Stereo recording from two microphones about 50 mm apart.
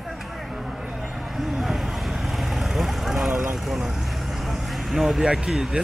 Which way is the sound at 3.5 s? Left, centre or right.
Centre.